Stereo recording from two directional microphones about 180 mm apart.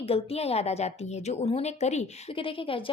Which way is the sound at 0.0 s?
35° left (ahead or behind).